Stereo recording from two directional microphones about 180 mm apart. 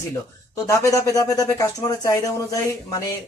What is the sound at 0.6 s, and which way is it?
Speech, 15° left (ahead or behind).